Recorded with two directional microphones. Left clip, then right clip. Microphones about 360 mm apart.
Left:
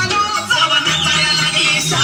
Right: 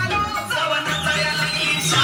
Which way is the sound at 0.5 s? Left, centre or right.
Centre.